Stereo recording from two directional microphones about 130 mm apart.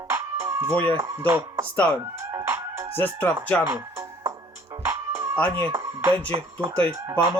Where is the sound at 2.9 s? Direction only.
15° left (ahead or behind).